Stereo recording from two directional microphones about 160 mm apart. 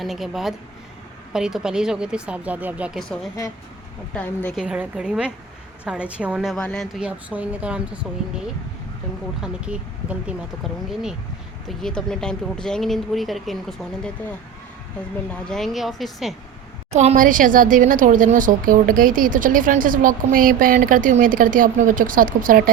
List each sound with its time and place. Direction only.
0.0 s speech: centre (ahead or behind)
4.1 s a woman's voice: 10° left (ahead or behind)
4.5 s speech: 5° right (ahead or behind)
7.1 s speech: 10° right (ahead or behind)
9.4 s speech: 5° right (ahead or behind)
15.3 s speech: 5° left (ahead or behind)
16.9 s a woman's voice: 45° right (ahead or behind); by 22.7 s 60° right (ahead or behind)